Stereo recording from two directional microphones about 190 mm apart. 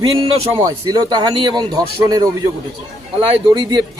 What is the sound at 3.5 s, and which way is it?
Speech, 25° right (ahead or behind).